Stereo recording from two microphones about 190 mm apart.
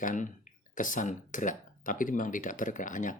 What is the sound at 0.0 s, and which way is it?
Speech, 40° left (ahead or behind).